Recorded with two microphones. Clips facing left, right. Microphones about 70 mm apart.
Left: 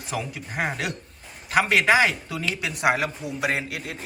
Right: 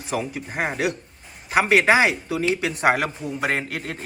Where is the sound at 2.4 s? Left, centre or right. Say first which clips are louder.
Right 5 dB; right.